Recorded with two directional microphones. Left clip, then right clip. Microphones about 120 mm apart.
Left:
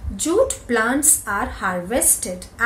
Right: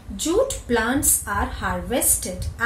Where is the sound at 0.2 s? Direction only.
Centre (ahead or behind).